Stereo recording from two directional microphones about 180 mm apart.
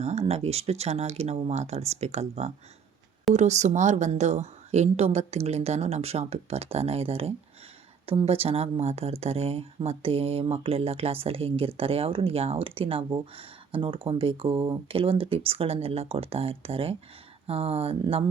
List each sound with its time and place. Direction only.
0.0 s speech: 35° right (ahead or behind)